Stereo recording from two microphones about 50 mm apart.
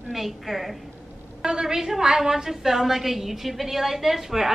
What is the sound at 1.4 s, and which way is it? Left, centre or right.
A woman's voice, centre.